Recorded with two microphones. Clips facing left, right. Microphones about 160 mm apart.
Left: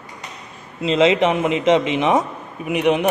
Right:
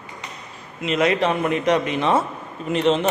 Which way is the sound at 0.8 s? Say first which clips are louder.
Left 4 dB; 30° left (ahead or behind).